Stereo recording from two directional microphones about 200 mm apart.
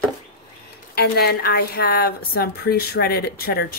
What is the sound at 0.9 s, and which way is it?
A woman's voice, 50° left (ahead or behind).